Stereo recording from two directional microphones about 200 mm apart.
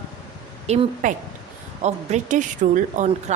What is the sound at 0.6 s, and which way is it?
A woman's voice, 35° right (ahead or behind).